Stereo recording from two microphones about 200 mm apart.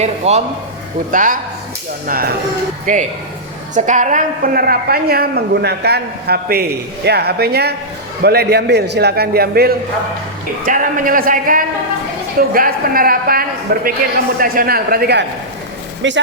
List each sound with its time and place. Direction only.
0.0 s a man's voice: 35° right (ahead or behind); by 15.2 s 50° right (ahead or behind)
16.0 s speech: 65° right (ahead or behind)